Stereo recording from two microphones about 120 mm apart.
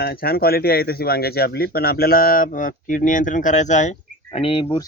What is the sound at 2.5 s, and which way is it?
Speech, 90° left.